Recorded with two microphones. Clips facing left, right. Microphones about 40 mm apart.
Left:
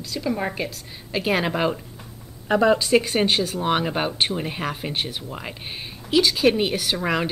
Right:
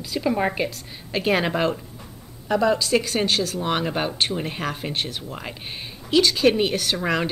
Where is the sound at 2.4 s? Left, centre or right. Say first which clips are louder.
Left 2 dB; left.